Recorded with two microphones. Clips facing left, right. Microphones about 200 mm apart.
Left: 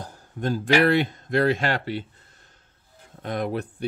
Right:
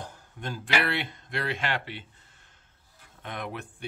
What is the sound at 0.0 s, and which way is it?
Speech, 40° left (ahead or behind).